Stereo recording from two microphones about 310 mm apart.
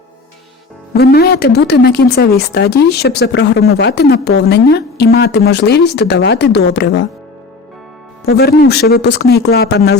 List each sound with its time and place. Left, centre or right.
0.9 s a woman's voice: left
8.3 s a woman's voice: left